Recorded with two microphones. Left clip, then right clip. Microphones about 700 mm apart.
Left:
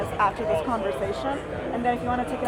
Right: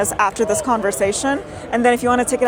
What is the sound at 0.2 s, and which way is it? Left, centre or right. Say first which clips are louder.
Speech: right 3 dB; right.